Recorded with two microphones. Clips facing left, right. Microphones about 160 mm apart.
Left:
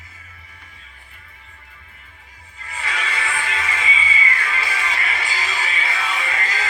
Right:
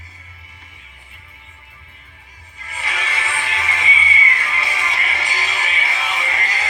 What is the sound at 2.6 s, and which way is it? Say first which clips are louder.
Music: even; 20° right (ahead or behind).